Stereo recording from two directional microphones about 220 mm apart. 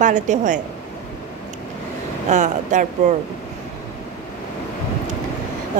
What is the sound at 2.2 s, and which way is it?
Speech, 35° right (ahead or behind).